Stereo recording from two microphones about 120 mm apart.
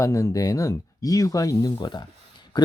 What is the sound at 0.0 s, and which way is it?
Speech, 25° left (ahead or behind).